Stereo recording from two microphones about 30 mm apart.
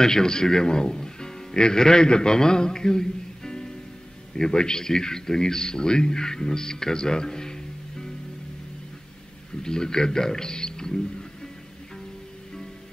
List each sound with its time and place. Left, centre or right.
0.0 s a man's voice: left
9.6 s a man's voice: left